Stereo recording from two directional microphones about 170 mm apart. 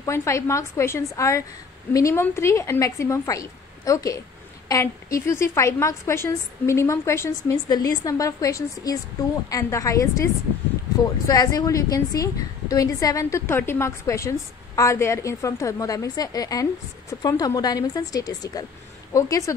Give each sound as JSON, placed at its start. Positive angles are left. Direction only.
{"t": 0.0, "sound": "a woman's voice", "side_deg": 15}